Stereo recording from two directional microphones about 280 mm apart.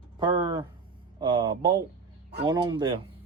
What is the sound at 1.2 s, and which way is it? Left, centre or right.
Speech, centre.